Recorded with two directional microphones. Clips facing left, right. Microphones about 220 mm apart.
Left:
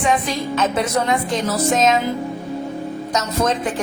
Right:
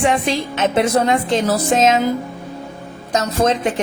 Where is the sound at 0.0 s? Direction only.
30° right (ahead or behind).